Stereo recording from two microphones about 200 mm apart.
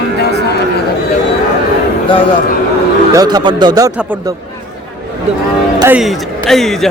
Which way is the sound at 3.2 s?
20° right (ahead or behind).